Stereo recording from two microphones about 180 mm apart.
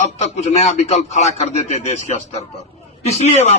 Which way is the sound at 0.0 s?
40° left (ahead or behind).